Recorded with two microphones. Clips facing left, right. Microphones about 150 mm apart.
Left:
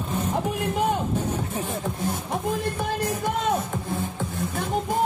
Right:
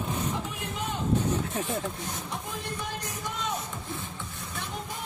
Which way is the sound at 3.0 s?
55° left (ahead or behind).